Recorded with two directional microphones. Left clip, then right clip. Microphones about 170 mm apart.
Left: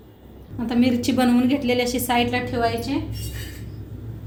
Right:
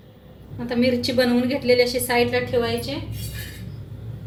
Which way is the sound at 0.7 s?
50° left (ahead or behind).